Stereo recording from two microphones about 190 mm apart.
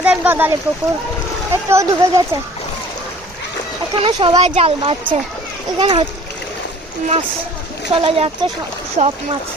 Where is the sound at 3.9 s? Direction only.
25° right (ahead or behind).